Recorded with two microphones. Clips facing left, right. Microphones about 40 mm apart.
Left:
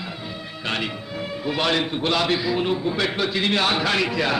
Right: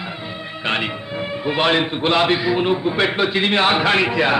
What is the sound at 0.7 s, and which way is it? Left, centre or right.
A man's voice, right.